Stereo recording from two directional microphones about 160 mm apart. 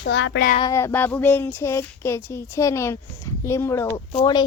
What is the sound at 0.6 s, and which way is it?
Speech, 15° left (ahead or behind).